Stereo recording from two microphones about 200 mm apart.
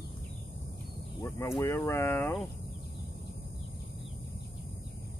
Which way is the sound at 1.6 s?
15° left (ahead or behind).